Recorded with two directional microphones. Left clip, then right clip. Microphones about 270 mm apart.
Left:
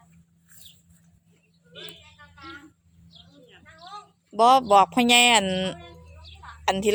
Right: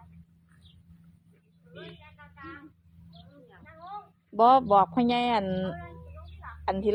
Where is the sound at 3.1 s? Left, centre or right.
Left.